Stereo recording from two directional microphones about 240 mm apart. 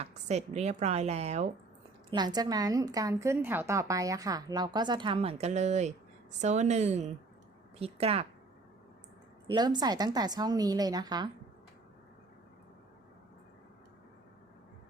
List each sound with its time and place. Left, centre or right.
0.0 s a woman's voice: right
9.5 s a woman's voice: centre